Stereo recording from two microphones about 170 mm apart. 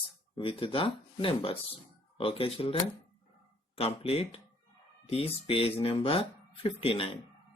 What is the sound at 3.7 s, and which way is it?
Speech, 35° left (ahead or behind).